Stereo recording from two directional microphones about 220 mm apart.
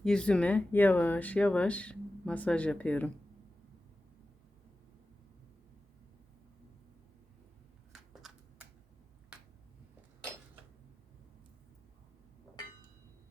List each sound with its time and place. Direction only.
0.0 s speech: 5° left (ahead or behind)
8.1 s shuffling cards: centre (ahead or behind)